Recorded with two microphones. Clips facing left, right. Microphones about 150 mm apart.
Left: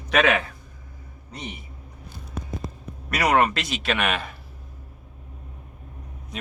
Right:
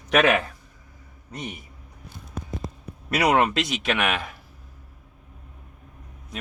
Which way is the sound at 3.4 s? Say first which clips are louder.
Even; 20° right (ahead or behind).